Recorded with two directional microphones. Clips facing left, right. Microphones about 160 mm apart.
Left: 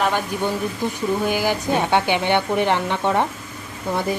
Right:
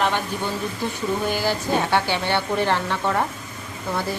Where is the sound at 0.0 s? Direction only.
10° left (ahead or behind).